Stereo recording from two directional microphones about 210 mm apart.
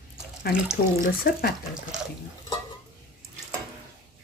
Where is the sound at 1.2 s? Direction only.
45° left (ahead or behind).